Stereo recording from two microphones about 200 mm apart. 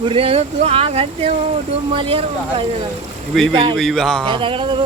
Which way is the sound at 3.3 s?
Centre (ahead or behind).